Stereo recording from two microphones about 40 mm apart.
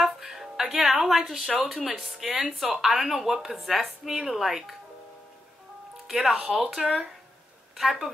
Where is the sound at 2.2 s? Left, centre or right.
Centre.